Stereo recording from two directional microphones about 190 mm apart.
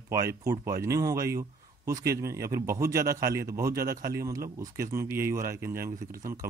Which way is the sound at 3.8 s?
50° right (ahead or behind).